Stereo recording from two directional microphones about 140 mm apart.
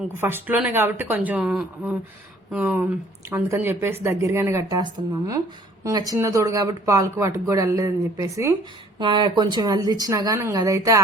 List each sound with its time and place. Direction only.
0.2 s speech: 15° right (ahead or behind)
9.0 s speech: 35° right (ahead or behind)